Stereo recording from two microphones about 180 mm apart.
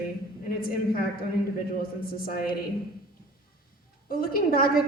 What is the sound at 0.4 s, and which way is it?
A woman's voice, 55° left (ahead or behind).